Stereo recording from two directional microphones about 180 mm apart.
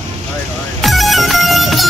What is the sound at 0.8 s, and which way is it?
Music, centre (ahead or behind).